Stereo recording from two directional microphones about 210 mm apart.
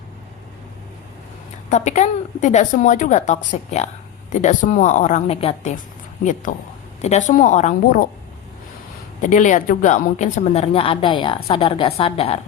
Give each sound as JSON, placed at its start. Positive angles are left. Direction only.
{"t": 1.7, "sound": "a woman's voice", "side_deg": 35}
{"t": 9.2, "sound": "a woman's voice", "side_deg": 35}